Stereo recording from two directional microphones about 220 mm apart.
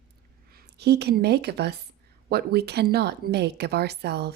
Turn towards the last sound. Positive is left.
turn(degrees=-50)  # may be behind; listen again after turning